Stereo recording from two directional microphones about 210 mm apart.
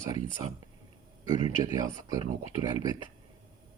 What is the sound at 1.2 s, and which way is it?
Speech, 20° right (ahead or behind).